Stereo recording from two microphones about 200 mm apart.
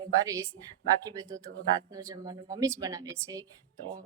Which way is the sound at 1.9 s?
15° right (ahead or behind).